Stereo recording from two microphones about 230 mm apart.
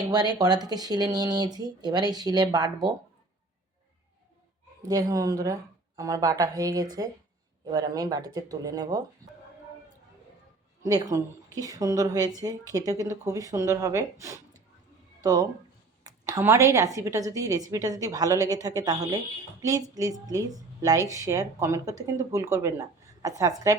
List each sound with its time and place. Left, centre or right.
0.1 s a woman's voice: centre
4.9 s a woman's voice: centre
10.8 s a woman's voice: centre